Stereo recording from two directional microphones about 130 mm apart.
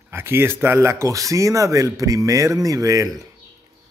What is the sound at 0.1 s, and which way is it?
Speech, 20° right (ahead or behind).